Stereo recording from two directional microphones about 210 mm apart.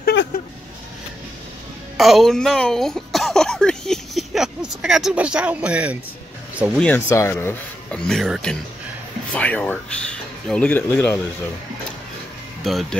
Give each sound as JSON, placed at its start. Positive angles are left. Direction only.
{"t": 0.0, "sound": "vehicle", "side_deg": 55}
{"t": 2.0, "sound": "a woman's voice", "side_deg": 0}
{"t": 6.8, "sound": "speech", "side_deg": 10}